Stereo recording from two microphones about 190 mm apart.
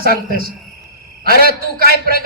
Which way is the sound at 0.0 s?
50° right (ahead or behind).